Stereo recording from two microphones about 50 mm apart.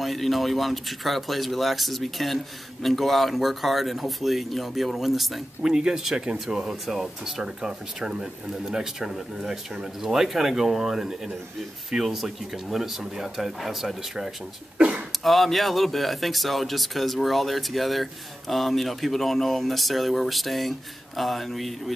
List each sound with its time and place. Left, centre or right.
0.0 s speech: centre
14.8 s a sound: right
15.2 s speech: centre